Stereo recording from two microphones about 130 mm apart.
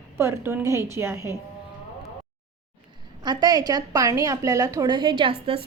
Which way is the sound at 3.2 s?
30° right (ahead or behind).